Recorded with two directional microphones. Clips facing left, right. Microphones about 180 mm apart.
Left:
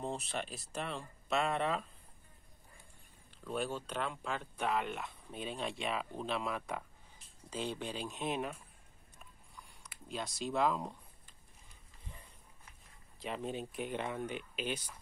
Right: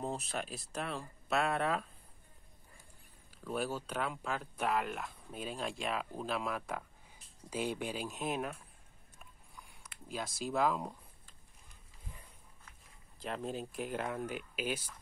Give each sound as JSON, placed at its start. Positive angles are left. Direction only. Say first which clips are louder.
{"t": 0.0, "sound": "speech", "louder": "right 1 dB", "side_deg": 0}
{"t": 3.3, "sound": "speech", "louder": "right 1 dB", "side_deg": -5}
{"t": 9.2, "sound": "a sound", "louder": "even", "side_deg": 0}
{"t": 13.2, "sound": "speech", "louder": "even", "side_deg": 0}